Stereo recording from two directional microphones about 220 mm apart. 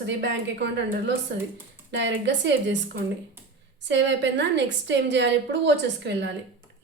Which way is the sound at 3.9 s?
55° right (ahead or behind).